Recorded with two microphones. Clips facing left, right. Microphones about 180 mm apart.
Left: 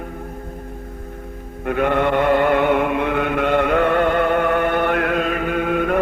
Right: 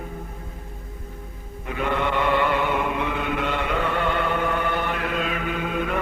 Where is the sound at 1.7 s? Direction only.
55° left (ahead or behind).